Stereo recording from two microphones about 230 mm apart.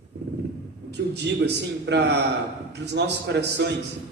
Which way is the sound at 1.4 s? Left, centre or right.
Right.